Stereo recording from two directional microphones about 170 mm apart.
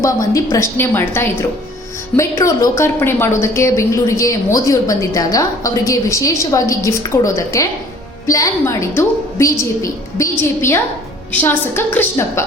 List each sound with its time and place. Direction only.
0.0 s a woman's voice: 20° left (ahead or behind)